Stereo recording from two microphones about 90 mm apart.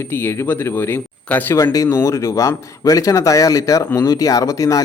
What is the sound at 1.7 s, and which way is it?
Speech, 40° left (ahead or behind).